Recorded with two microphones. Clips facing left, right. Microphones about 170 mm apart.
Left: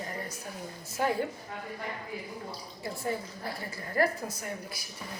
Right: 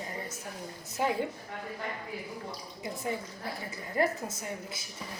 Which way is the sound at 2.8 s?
20° right (ahead or behind).